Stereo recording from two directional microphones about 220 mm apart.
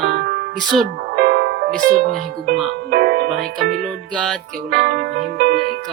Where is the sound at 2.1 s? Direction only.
45° right (ahead or behind).